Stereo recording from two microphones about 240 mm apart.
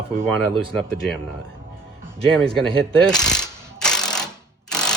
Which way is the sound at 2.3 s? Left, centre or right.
Centre.